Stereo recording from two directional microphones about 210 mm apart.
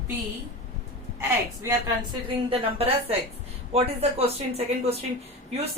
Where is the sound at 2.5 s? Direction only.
30° right (ahead or behind).